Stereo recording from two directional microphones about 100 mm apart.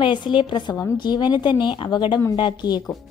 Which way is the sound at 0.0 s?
55° left (ahead or behind).